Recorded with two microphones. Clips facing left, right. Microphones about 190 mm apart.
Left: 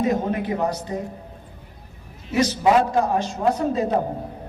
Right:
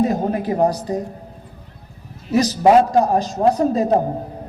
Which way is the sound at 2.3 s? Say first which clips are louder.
Right 5 dB; 35° right (ahead or behind).